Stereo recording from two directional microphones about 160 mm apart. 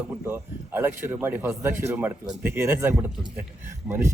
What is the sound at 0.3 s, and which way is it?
Speech, 15° right (ahead or behind).